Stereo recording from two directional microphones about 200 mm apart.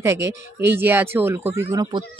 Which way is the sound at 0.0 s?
15° right (ahead or behind).